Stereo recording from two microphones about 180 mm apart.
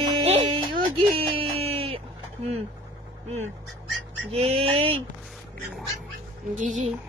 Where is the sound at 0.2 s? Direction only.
35° right (ahead or behind).